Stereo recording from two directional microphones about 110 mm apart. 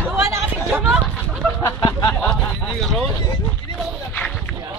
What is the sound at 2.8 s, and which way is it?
Vehicle, 5° left (ahead or behind).